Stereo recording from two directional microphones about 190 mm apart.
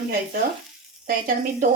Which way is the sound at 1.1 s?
45° right (ahead or behind).